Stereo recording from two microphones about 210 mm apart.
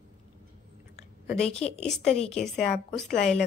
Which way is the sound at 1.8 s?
5° left (ahead or behind).